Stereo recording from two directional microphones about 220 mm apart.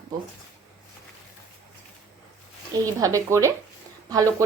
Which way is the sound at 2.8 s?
15° right (ahead or behind).